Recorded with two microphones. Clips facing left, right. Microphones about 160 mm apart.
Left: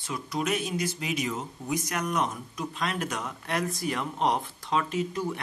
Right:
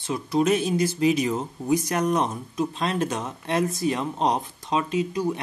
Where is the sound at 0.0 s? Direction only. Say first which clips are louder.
Right 8 dB; 30° right (ahead or behind).